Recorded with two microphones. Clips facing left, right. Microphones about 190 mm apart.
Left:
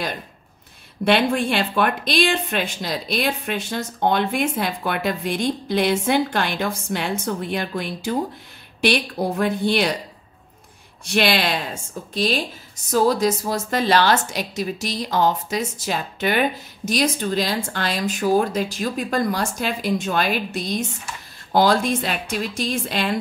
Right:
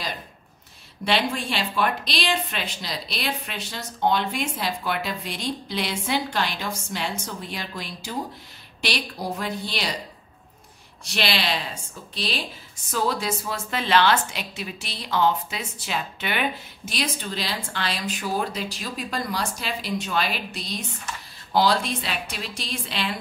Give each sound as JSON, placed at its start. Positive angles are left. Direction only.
{"t": 1.0, "sound": "a woman's voice", "side_deg": 55}
{"t": 11.1, "sound": "a woman's voice", "side_deg": 50}